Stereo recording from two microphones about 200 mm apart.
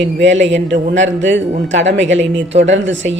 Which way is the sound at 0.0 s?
65° right (ahead or behind).